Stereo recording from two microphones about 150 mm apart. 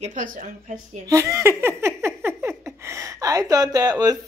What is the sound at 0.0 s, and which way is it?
Speech, 60° right (ahead or behind).